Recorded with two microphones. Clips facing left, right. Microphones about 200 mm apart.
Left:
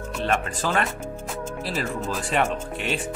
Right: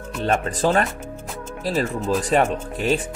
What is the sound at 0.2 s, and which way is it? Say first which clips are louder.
Speech: right 5 dB; 35° right (ahead or behind).